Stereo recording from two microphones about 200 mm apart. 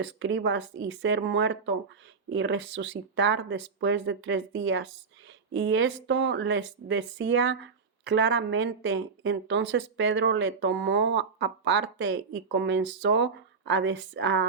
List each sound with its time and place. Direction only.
0.0 s speech: 65° right (ahead or behind)